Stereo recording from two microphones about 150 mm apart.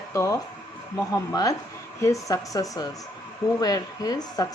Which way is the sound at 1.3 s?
25° left (ahead or behind).